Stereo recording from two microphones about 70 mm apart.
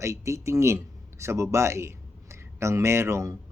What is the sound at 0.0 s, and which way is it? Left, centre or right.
Speech, right.